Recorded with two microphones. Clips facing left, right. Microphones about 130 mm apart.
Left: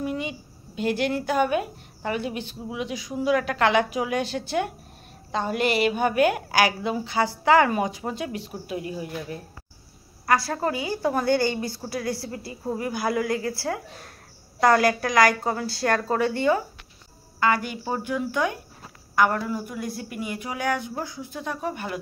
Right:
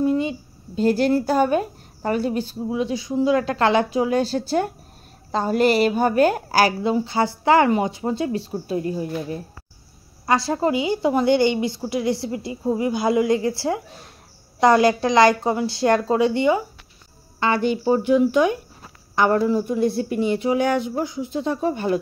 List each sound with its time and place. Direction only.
0.0 s a woman's voice: 35° right (ahead or behind)
10.2 s a woman's voice: 25° right (ahead or behind)